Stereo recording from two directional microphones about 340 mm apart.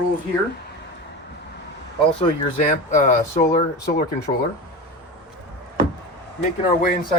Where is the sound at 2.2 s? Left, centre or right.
Left.